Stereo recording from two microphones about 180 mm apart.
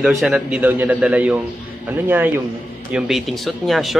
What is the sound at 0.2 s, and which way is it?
A man's voice, 5° right (ahead or behind).